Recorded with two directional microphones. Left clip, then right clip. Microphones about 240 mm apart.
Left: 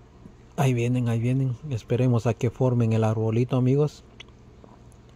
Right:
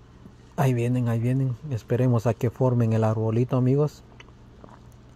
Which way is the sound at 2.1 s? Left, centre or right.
Centre.